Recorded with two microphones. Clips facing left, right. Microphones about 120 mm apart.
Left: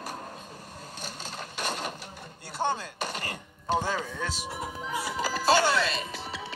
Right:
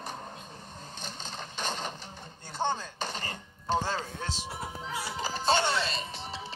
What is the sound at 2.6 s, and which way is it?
Chopping, 45° left (ahead or behind).